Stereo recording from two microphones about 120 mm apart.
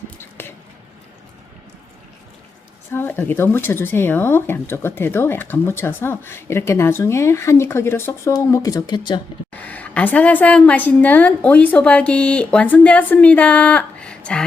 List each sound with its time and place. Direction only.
0.2 s squish: 20° left (ahead or behind)
2.9 s speech: 20° left (ahead or behind); by 9.2 s 35° left (ahead or behind)
9.5 s a woman's voice: 15° left (ahead or behind)